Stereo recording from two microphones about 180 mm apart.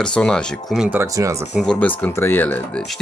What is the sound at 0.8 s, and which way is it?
Speech, 15° right (ahead or behind).